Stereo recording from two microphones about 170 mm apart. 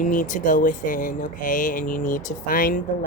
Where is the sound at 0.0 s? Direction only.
50° left (ahead or behind).